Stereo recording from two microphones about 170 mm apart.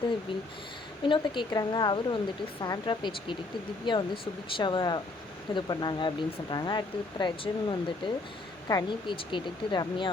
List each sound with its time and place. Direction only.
1.0 s speech: 30° left (ahead or behind)